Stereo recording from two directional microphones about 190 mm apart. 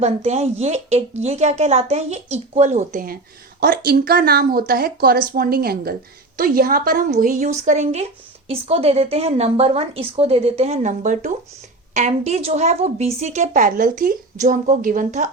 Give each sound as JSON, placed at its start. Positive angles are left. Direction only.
{"t": 0.0, "sound": "a woman's voice", "side_deg": -35}